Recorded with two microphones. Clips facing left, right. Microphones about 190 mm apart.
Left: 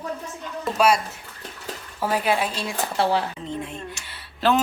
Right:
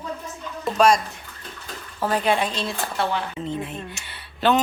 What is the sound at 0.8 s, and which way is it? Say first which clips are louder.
Speech: right 2 dB; 10° left (ahead or behind).